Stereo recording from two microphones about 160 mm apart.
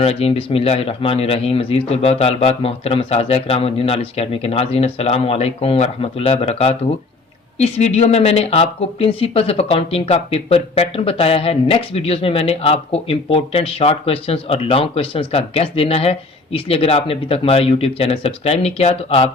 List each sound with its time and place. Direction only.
0.0 s speech: 40° left (ahead or behind)